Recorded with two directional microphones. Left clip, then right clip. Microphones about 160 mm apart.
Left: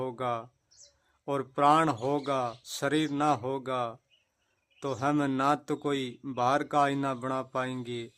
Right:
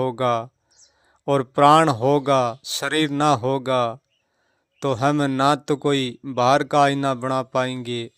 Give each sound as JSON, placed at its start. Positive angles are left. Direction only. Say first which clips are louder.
{"t": 0.0, "sound": "speech", "louder": "right 11 dB", "side_deg": -30}